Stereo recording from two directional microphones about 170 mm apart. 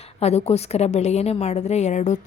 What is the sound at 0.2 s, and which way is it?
A woman's voice, 40° left (ahead or behind).